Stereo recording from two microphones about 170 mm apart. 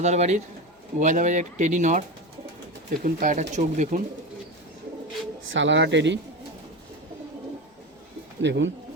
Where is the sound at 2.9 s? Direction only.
55° right (ahead or behind).